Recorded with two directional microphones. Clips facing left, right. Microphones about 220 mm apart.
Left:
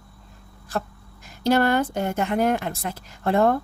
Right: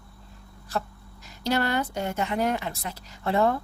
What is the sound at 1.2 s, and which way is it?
A woman's voice, 50° left (ahead or behind).